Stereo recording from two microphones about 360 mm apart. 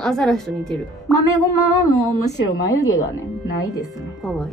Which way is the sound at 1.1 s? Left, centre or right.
Left.